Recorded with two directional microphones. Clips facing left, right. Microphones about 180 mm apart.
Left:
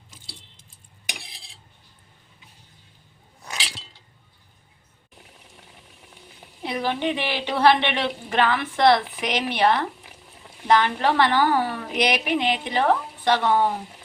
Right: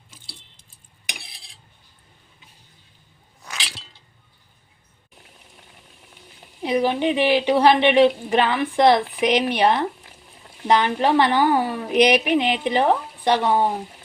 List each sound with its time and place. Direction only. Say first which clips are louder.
6.6 s a woman's voice: right 5 dB; 15° right (ahead or behind)